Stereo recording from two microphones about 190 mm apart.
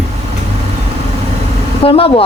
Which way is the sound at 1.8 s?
30° left (ahead or behind).